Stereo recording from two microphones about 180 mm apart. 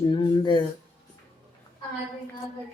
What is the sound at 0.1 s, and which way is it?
Speech, 25° left (ahead or behind).